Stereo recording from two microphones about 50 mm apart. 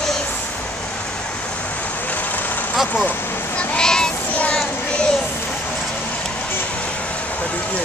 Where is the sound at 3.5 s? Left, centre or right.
Left.